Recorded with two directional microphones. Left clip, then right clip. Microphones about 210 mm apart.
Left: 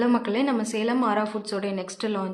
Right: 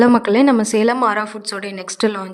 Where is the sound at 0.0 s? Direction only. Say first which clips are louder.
Right 11 dB; 55° right (ahead or behind).